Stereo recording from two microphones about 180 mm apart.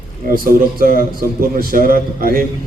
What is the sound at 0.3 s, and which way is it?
A man's voice, 55° right (ahead or behind).